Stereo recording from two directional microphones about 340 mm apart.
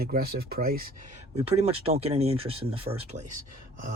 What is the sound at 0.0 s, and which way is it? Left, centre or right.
Speech, right.